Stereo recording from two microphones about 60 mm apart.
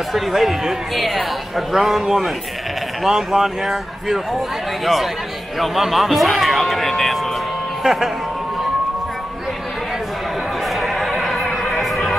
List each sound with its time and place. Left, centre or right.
0.1 s speech: centre
5.6 s a sound: centre
7.8 s speech: centre
10.8 s neigh: centre
11.4 s music: centre